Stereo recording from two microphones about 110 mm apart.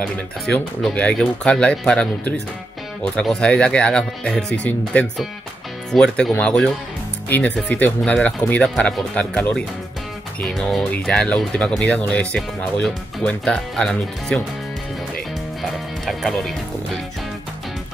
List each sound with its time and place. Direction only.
0.0 s speech: 10° left (ahead or behind)
16.1 s speech: centre (ahead or behind)